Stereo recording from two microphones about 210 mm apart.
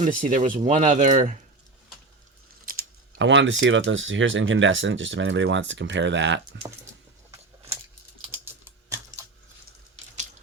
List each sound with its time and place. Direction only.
0.0 s speech: 40° right (ahead or behind)
2.7 s a sound: 40° right (ahead or behind)
3.2 s speech: 60° right (ahead or behind)
8.3 s typing: 10° right (ahead or behind)